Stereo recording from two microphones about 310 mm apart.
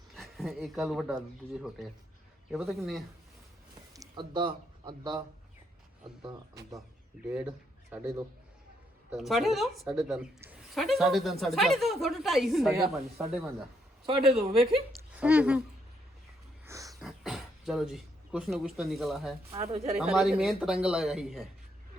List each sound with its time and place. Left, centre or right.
0.2 s speech: centre
2.5 s a woman's voice: centre
3.9 s speech: centre
7.3 s a woman's voice: centre
14.0 s speech: centre
14.9 s a woman's voice: centre
16.6 s a sound: centre
17.0 s speech: centre
19.5 s speech: centre
20.0 s a woman's voice: centre